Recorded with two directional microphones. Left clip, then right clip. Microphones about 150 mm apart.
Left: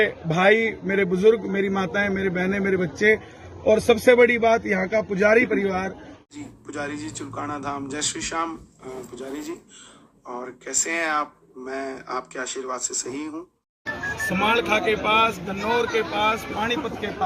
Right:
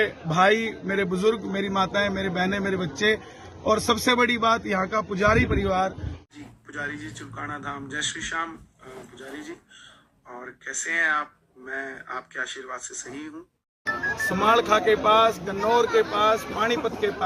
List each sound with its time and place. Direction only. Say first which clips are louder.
0.0 s a man's voice: left 1 dB; 30° right (ahead or behind)
3.7 s a man's voice: left 5 dB; 40° right (ahead or behind); by 5.9 s 20° right (ahead or behind)
6.7 s speech: left 2 dB; 5° left (ahead or behind)
13.8 s speech: right 1 dB; 10° right (ahead or behind)